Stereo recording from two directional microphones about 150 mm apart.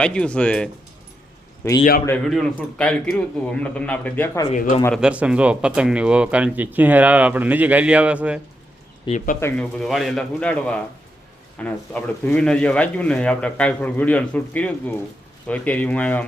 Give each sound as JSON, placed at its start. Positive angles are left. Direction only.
{"t": 0.0, "sound": "speech", "side_deg": 5}
{"t": 1.6, "sound": "speech", "side_deg": 20}
{"t": 2.0, "sound": "speech", "side_deg": 5}
{"t": 4.5, "sound": "speech", "side_deg": 55}
{"t": 4.9, "sound": "speech", "side_deg": -5}
{"t": 9.1, "sound": "speech", "side_deg": 30}
{"t": 9.4, "sound": "speech", "side_deg": 10}